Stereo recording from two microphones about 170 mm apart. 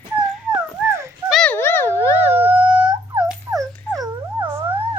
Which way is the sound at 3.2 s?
15° right (ahead or behind).